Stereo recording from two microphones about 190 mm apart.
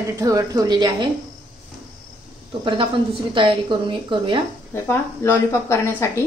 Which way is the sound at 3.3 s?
25° right (ahead or behind).